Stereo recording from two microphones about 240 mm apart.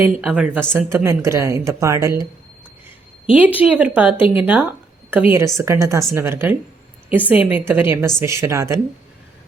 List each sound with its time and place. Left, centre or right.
0.2 s speech: centre
3.3 s speech: centre